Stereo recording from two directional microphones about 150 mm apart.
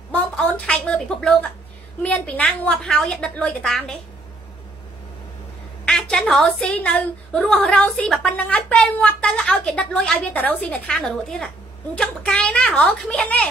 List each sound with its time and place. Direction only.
0.1 s a sound: 10° left (ahead or behind)
2.0 s a woman's voice: 10° left (ahead or behind)
5.9 s a woman's voice: 5° left (ahead or behind)